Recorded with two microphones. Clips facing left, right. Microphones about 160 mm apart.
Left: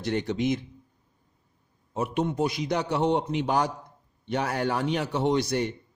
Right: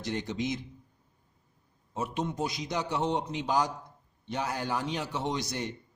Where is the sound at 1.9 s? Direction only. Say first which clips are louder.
Left 5 dB; 60° left (ahead or behind).